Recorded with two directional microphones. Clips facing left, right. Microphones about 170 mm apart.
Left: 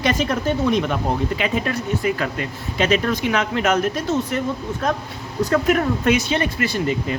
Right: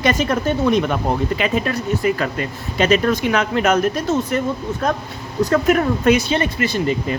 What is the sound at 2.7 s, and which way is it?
Speech, 40° right (ahead or behind).